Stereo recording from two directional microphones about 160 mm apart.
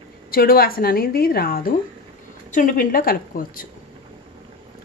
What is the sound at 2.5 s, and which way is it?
A woman's voice, 55° left (ahead or behind).